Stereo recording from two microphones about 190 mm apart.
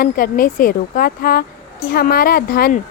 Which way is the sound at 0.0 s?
50° left (ahead or behind).